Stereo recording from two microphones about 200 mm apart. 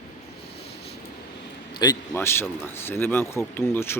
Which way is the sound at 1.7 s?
20° left (ahead or behind).